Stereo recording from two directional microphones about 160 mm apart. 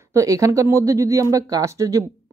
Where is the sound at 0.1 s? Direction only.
20° right (ahead or behind).